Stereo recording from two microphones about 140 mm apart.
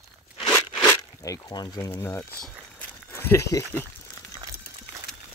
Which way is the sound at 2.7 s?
15° left (ahead or behind).